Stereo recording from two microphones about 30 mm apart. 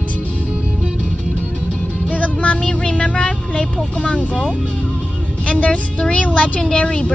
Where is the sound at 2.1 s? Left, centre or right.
Left.